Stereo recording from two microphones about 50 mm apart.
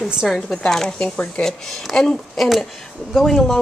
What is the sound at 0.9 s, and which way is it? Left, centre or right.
Speech, left.